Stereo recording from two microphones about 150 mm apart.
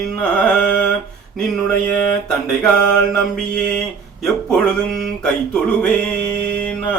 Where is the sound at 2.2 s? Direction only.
5° left (ahead or behind).